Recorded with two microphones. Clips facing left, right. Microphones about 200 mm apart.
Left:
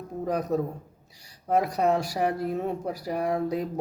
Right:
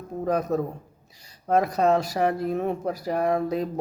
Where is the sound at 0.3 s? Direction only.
15° left (ahead or behind).